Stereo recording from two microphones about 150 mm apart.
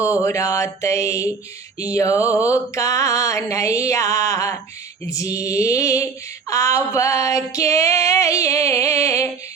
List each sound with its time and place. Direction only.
0.0 s female singing: 20° left (ahead or behind)